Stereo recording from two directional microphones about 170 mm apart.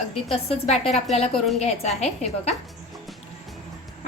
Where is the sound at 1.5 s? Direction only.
40° left (ahead or behind).